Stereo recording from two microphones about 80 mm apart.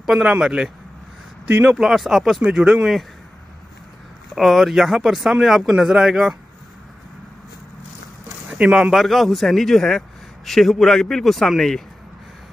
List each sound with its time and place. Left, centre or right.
0.0 s speech: centre
1.7 s speech: centre
4.4 s speech: centre
8.5 s speech: centre